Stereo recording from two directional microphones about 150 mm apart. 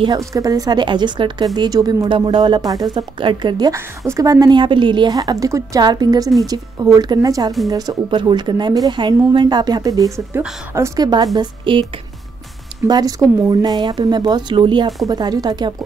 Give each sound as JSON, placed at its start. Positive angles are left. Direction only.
{"t": 0.0, "sound": "speech", "side_deg": -25}
{"t": 11.3, "sound": "speech", "side_deg": -35}
{"t": 12.8, "sound": "speech", "side_deg": -25}